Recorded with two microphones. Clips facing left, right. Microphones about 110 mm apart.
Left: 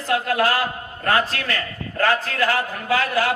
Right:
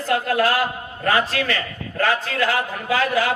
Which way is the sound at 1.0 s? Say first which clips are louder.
Right 1 dB; 40° left (ahead or behind).